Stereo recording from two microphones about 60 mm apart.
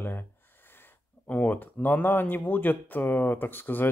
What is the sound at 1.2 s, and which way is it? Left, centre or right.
Speech, left.